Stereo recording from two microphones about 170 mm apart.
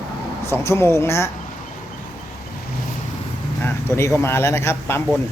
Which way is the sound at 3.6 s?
15° left (ahead or behind).